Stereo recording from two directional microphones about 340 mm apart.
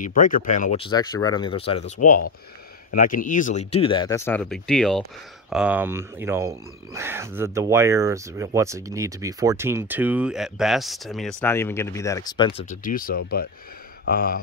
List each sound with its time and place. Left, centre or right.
0.0 s speech: left